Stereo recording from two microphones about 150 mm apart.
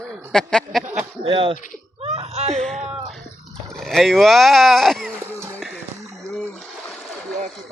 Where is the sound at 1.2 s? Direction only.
35° right (ahead or behind).